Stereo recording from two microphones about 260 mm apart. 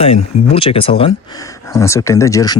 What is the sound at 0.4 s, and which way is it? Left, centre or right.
Speech, left.